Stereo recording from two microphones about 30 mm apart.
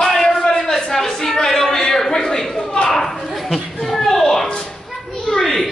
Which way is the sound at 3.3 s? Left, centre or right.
Centre.